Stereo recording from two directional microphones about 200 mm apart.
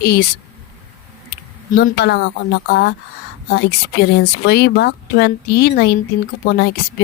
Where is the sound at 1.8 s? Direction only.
55° left (ahead or behind).